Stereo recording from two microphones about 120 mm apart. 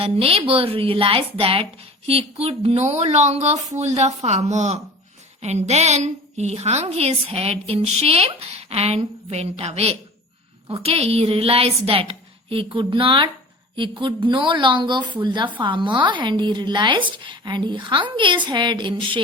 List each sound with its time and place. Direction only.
0.0 s a woman's voice: 55° right (ahead or behind)